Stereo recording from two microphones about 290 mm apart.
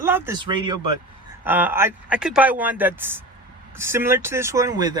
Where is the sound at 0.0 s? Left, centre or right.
Centre.